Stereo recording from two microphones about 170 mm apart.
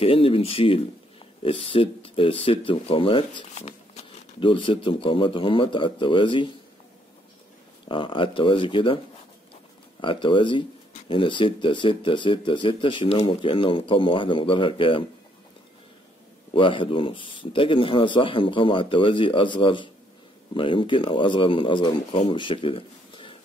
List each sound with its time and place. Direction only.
0.0 s speech: 35° left (ahead or behind)
7.9 s speech: 30° left (ahead or behind)
10.0 s speech: 30° left (ahead or behind)
16.5 s speech: 30° left (ahead or behind)